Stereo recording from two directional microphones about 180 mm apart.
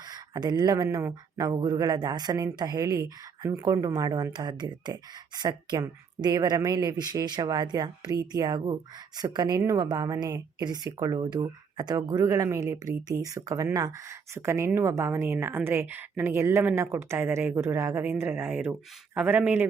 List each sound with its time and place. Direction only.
0.1 s speech: 20° right (ahead or behind)